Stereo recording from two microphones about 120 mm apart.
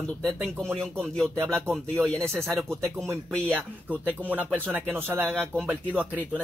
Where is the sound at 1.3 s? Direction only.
20° right (ahead or behind).